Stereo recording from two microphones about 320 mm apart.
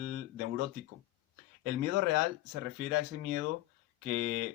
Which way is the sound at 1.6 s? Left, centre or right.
Right.